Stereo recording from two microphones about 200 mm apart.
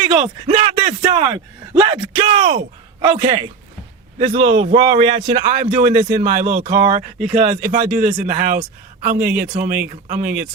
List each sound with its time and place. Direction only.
0.1 s a man's voice: 30° right (ahead or behind)